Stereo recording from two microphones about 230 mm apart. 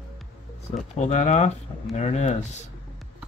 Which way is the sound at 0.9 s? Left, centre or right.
Left.